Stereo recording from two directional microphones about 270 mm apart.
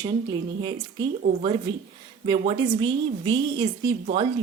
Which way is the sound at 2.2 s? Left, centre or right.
Centre.